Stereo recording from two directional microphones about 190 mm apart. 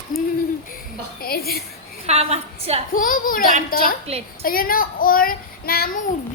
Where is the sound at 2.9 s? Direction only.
45° left (ahead or behind).